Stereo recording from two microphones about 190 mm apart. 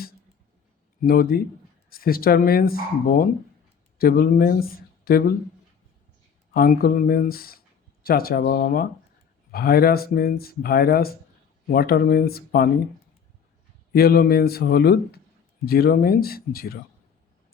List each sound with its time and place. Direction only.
1.0 s speech: 50° left (ahead or behind)
6.5 s speech: 50° left (ahead or behind)
13.9 s speech: 55° left (ahead or behind)